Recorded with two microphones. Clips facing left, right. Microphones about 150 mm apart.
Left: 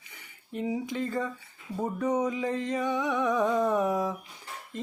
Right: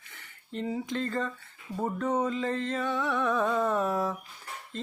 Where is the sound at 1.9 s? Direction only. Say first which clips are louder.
Left 1 dB; 15° left (ahead or behind).